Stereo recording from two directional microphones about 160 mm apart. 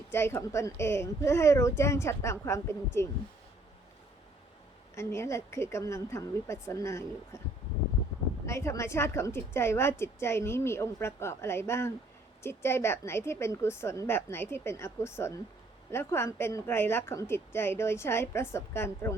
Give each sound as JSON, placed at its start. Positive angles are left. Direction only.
{"t": 0.1, "sound": "a woman's voice", "side_deg": 15}
{"t": 4.9, "sound": "a woman's voice", "side_deg": 15}
{"t": 8.4, "sound": "a woman's voice", "side_deg": 15}